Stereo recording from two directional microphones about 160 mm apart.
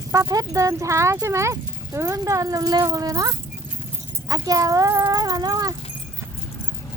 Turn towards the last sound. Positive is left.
turn(degrees=-25)  # may be behind; listen again after turning